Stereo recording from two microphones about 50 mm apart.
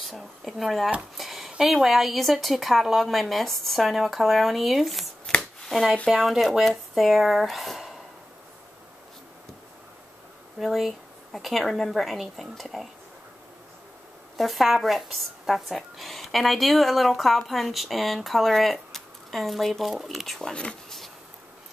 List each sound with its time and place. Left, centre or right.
0.0 s speech: centre
1.1 s a sound: centre
1.6 s speech: centre
5.3 s shuffling cards: centre
6.0 s speech: centre
10.6 s speech: centre
14.3 s speech: centre
20.4 s speech: left